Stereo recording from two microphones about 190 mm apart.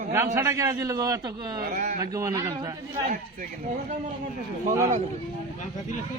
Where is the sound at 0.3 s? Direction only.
15° right (ahead or behind).